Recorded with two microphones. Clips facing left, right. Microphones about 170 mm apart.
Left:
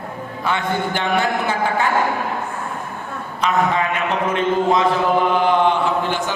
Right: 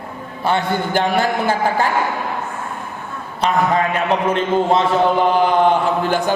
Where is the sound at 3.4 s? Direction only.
35° right (ahead or behind).